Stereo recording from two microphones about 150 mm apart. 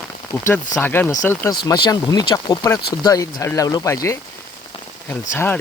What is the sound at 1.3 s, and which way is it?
Speech, 25° left (ahead or behind).